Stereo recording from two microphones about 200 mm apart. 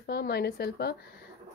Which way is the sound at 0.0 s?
50° left (ahead or behind).